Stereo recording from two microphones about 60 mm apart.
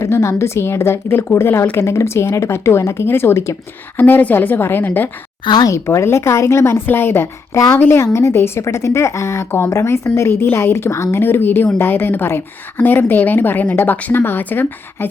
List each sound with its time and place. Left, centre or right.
0.0 s a woman's voice: left
5.7 s a woman's voice: left
11.2 s a woman's voice: left